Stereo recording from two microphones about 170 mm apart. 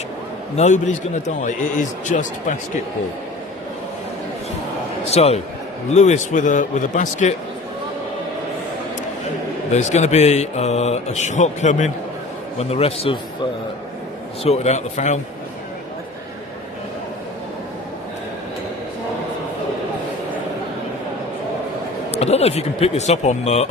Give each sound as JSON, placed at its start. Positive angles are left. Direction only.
{"t": 0.5, "sound": "a man's voice", "side_deg": 45}
{"t": 5.1, "sound": "a man's voice", "side_deg": 40}
{"t": 9.7, "sound": "speech", "side_deg": 40}
{"t": 22.1, "sound": "speech", "side_deg": 40}